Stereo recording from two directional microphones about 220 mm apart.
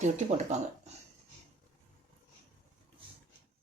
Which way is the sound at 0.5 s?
30° right (ahead or behind).